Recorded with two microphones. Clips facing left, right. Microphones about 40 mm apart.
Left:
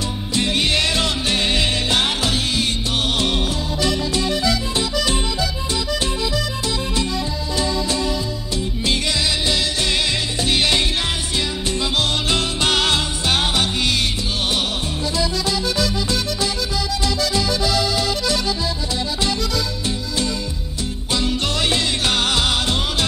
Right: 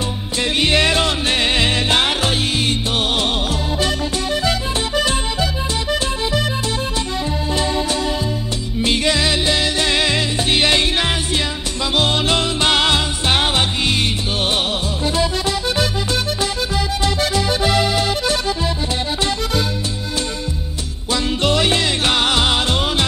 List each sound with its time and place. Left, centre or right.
0.4 s music: right
4.5 s music: right
8.8 s music: right
15.7 s music: right
21.1 s music: right